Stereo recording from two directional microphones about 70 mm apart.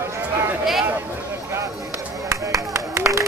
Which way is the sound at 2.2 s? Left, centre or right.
Right.